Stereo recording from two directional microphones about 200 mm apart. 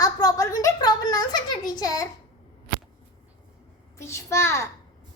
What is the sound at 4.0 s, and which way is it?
Speech, 15° left (ahead or behind).